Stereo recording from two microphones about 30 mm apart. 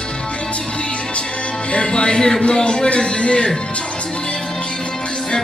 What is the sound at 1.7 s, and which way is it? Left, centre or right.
Music, left.